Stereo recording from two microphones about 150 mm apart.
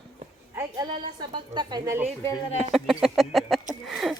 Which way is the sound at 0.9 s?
30° right (ahead or behind).